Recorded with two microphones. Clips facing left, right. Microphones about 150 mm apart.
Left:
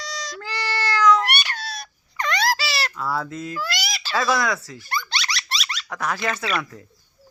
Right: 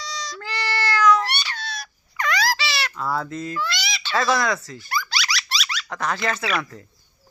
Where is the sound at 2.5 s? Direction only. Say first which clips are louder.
Left 1 dB; 35° left (ahead or behind).